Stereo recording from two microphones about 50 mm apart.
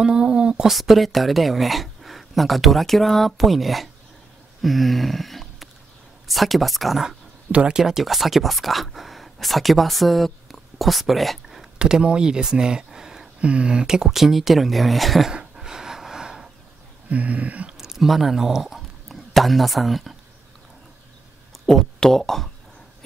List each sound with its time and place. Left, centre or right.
0.0 s speech: centre
0.7 s speech: centre
4.6 s a sound: centre
6.2 s speech: centre
7.1 s speech: centre
7.8 s speech: centre
11.8 s speech: centre
15.5 s snort: centre
17.1 s a sound: right
17.7 s speech: centre
21.6 s speech: centre